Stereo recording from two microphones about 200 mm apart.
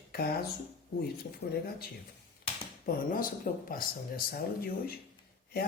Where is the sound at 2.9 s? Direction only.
45° left (ahead or behind).